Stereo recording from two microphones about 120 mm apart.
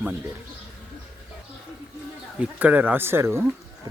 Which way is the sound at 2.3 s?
10° right (ahead or behind).